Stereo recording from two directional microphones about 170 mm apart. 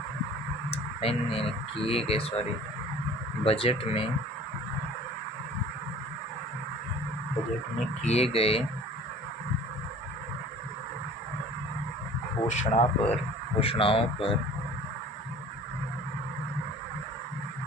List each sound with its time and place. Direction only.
0.7 s speech: 35° left (ahead or behind)
3.4 s speech: 35° left (ahead or behind)
8.0 s speech: 35° left (ahead or behind)
12.5 s speech: 40° left (ahead or behind)